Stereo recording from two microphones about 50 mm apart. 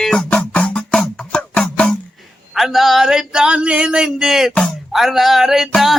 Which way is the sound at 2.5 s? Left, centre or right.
Centre.